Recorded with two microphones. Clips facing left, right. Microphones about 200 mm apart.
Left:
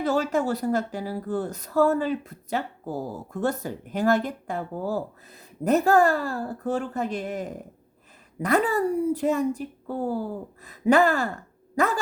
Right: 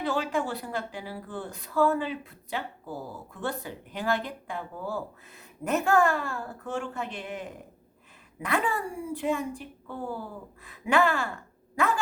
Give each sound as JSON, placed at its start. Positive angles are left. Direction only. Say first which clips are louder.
{"t": 0.0, "sound": "a woman's voice", "louder": "left 5 dB", "side_deg": 45}